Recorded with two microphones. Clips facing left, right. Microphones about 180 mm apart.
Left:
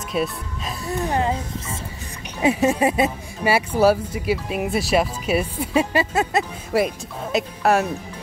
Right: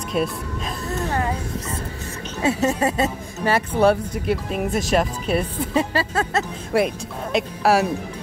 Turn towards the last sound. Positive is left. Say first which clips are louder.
# right 1 dB
turn(degrees=0)  # may be behind; listen again after turning